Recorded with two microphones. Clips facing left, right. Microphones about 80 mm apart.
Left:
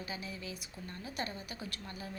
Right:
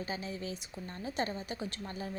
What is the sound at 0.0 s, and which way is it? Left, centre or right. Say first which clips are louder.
A woman's voice: right 4 dB; right.